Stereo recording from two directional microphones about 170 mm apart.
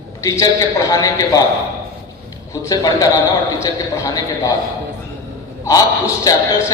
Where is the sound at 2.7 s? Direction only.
20° left (ahead or behind).